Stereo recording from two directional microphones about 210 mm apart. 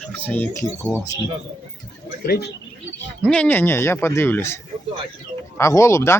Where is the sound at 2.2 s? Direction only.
45° left (ahead or behind).